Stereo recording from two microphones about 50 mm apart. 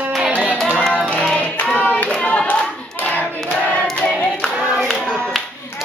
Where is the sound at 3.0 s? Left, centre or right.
Left.